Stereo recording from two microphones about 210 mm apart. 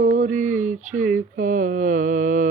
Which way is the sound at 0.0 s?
35° right (ahead or behind).